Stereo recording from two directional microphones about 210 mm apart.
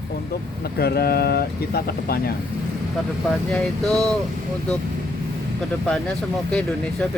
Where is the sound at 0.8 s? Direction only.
50° left (ahead or behind).